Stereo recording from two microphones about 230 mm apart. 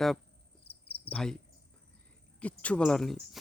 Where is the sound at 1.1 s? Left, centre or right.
Centre.